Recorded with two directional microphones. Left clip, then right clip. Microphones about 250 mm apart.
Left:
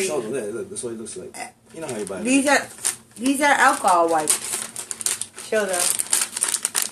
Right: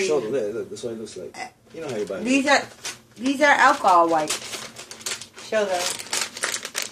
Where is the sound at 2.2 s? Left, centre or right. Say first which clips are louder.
Left 1 dB; centre.